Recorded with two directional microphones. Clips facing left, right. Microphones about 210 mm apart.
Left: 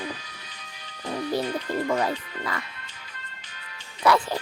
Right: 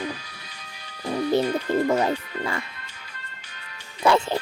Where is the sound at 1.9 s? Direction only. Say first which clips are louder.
Right 3 dB; 25° right (ahead or behind).